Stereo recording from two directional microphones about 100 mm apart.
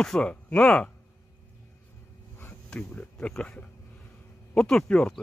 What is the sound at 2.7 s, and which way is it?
Speech, 10° left (ahead or behind).